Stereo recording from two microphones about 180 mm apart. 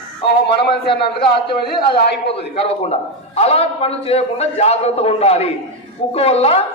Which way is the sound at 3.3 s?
35° left (ahead or behind).